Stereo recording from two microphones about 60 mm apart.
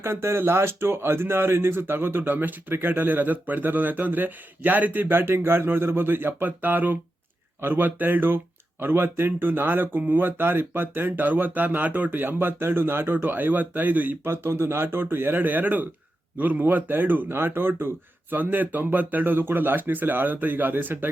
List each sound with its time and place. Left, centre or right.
0.0 s speech: right
14.3 s speech: right